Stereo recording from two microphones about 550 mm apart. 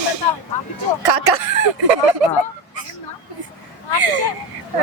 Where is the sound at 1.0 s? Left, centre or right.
Right.